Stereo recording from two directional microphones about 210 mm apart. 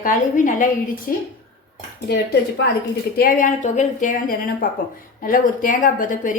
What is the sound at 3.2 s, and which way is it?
A woman's voice, 40° left (ahead or behind).